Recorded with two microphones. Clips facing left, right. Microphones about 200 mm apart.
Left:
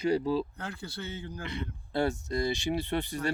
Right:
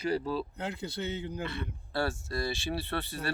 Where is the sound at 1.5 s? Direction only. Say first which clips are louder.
Left 1 dB; 20° left (ahead or behind).